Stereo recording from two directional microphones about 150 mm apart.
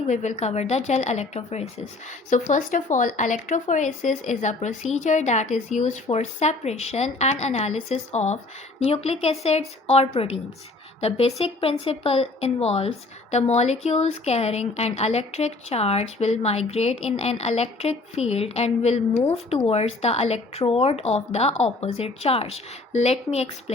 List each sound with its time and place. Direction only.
0.1 s speech: 50° left (ahead or behind)
2.0 s a woman's voice: 55° left (ahead or behind)